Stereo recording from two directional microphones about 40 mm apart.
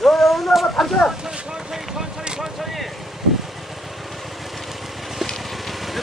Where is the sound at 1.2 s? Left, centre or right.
Right.